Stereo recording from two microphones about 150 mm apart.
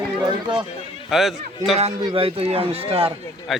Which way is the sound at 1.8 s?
40° right (ahead or behind).